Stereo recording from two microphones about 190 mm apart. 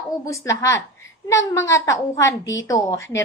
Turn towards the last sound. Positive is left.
turn(degrees=15)  # may be behind; listen again after turning